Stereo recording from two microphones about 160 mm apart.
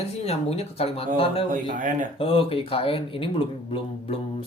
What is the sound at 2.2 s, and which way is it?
Speech, 35° left (ahead or behind).